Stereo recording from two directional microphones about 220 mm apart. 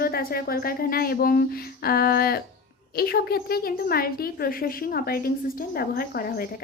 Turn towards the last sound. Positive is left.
turn(degrees=40)  # may be behind; listen again after turning